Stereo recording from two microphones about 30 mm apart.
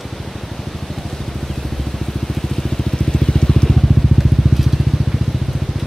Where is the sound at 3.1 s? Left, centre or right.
Left.